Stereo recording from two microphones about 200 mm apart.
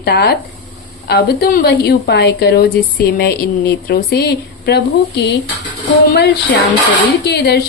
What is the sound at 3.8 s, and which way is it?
Speech, 50° left (ahead or behind).